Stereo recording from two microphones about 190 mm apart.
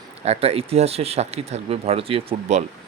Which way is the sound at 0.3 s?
30° right (ahead or behind).